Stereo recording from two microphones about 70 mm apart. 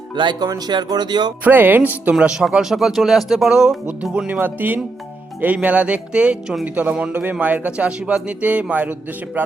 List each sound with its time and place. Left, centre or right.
0.3 s speech: right
1.5 s a man's voice: right
2.1 s speech: centre
4.3 s a man's voice: right